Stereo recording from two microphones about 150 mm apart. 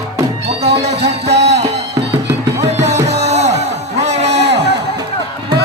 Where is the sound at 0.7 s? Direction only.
45° right (ahead or behind).